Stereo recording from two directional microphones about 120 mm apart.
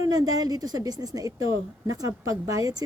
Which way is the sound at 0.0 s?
30° right (ahead or behind).